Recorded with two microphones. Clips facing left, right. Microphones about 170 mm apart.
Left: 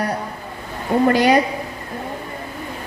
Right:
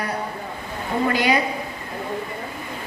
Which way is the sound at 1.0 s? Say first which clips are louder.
Left 5 dB; 45° left (ahead or behind).